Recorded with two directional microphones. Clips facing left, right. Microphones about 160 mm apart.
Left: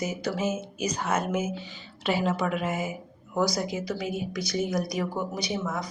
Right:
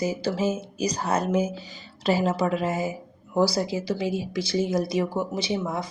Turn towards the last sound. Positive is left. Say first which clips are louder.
# right 3 dB
turn(degrees=-25)  # may be behind; listen again after turning